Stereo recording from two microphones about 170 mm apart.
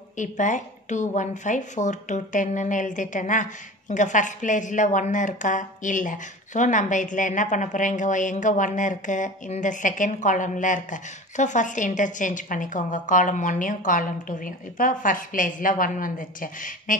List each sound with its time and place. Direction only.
0.2 s a woman's voice: 45° left (ahead or behind)